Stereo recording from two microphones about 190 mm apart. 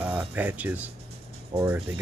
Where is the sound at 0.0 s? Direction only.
10° right (ahead or behind).